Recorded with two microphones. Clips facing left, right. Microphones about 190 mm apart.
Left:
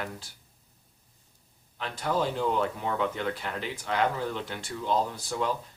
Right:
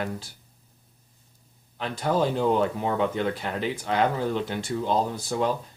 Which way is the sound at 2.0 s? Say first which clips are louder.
Right 5 dB; 35° right (ahead or behind).